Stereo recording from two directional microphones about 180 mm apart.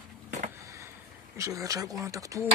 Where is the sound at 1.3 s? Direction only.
20° right (ahead or behind).